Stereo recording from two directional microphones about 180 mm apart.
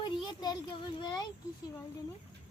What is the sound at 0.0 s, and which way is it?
A child's voice, 25° left (ahead or behind).